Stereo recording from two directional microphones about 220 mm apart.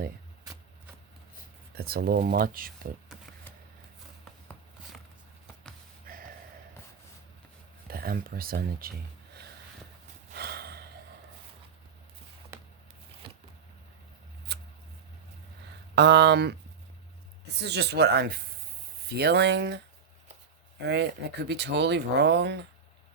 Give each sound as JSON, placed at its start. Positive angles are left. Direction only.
{"t": 1.7, "sound": "speech", "side_deg": -45}
{"t": 7.9, "sound": "speech", "side_deg": -40}
{"t": 10.3, "sound": "gasp", "side_deg": -45}
{"t": 12.5, "sound": "a sound", "side_deg": -10}
{"t": 13.2, "sound": "vehicle", "side_deg": -25}
{"t": 14.5, "sound": "a sound", "side_deg": -50}
{"t": 16.0, "sound": "speech", "side_deg": -50}
{"t": 20.8, "sound": "speech", "side_deg": -50}